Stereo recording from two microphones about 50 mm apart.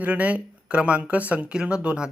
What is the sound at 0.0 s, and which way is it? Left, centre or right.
Speech, right.